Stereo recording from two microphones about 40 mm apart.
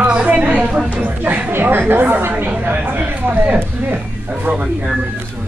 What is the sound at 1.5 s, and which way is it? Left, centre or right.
Speech, right.